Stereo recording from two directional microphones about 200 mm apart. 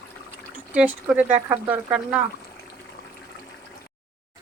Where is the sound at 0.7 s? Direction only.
5° right (ahead or behind).